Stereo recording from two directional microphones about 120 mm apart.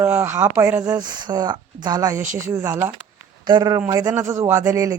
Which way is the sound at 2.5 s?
20° right (ahead or behind).